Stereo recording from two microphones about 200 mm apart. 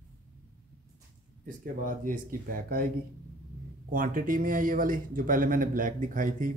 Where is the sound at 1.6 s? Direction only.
40° right (ahead or behind).